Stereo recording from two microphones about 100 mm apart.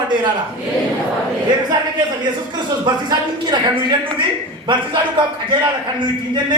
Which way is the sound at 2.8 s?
50° right (ahead or behind).